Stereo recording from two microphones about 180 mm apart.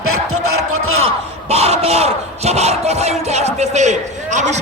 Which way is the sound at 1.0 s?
35° right (ahead or behind).